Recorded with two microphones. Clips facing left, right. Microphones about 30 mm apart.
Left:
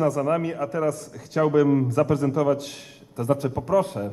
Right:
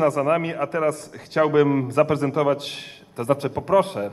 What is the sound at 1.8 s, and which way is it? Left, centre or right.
A man's voice, right.